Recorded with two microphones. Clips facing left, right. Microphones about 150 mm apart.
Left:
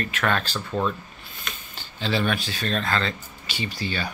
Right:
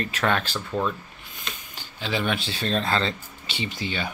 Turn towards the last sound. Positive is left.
turn(degrees=-20)  # may be behind; listen again after turning